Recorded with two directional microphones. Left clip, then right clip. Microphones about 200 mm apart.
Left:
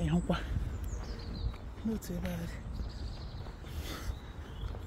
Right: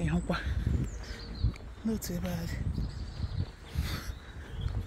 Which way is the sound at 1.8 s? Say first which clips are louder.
Right 3 dB; 25° right (ahead or behind).